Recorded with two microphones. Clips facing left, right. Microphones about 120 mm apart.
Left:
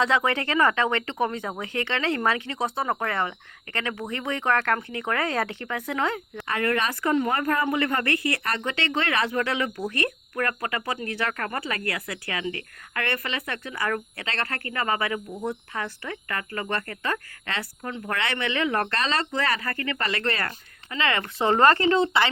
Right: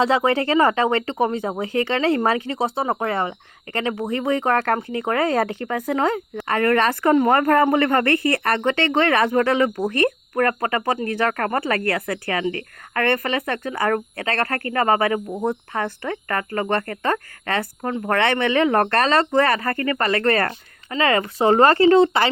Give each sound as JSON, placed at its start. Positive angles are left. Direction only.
{"t": 0.0, "sound": "speech", "side_deg": -30}
{"t": 6.5, "sound": "speech", "side_deg": -50}
{"t": 20.9, "sound": "speech", "side_deg": -35}
{"t": 21.9, "sound": "speech", "side_deg": -55}